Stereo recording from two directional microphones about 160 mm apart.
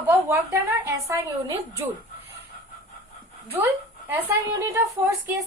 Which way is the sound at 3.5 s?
15° right (ahead or behind).